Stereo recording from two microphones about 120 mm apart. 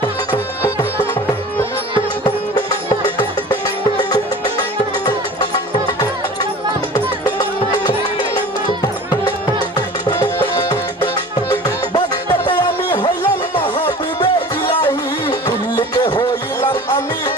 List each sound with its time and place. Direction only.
3.2 s music: 40° left (ahead or behind)
6.9 s music: 35° left (ahead or behind)
10.5 s music: 35° left (ahead or behind)
15.3 s music: 35° left (ahead or behind)